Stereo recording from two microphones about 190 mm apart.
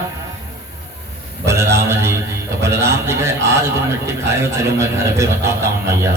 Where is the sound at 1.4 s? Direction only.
15° right (ahead or behind).